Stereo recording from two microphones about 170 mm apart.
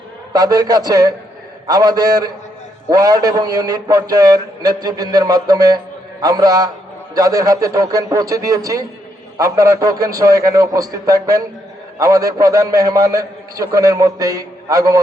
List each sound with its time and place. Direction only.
0.3 s a man's voice: 25° right (ahead or behind)